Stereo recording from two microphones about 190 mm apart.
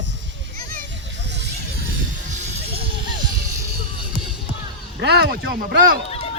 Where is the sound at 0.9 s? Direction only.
65° right (ahead or behind).